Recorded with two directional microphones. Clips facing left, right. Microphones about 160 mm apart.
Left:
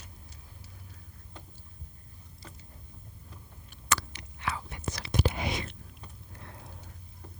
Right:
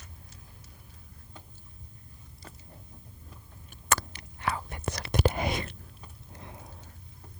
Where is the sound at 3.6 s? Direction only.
45° right (ahead or behind).